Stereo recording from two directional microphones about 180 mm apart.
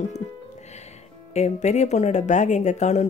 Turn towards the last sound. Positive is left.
turn(degrees=40)  # may be behind; listen again after turning